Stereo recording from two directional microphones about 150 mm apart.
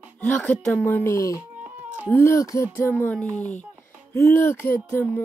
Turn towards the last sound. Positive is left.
turn(degrees=10)  # may be behind; listen again after turning